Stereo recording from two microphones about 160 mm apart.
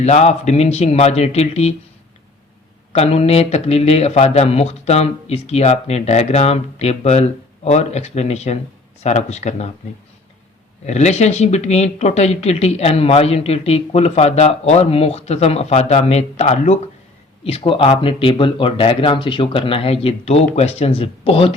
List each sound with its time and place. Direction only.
0.0 s speech: 45° left (ahead or behind)
2.9 s speech: 40° left (ahead or behind)
10.8 s speech: 45° left (ahead or behind)